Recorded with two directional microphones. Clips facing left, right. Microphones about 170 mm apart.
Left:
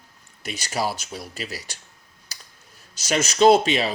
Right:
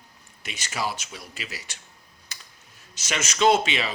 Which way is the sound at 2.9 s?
35° left (ahead or behind).